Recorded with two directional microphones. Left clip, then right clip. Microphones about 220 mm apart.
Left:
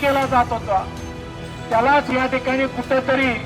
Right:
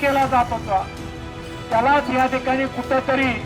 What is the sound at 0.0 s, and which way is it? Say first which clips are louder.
Speech: even; 30° left (ahead or behind).